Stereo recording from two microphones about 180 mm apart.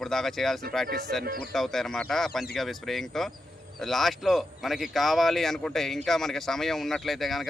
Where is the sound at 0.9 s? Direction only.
60° right (ahead or behind).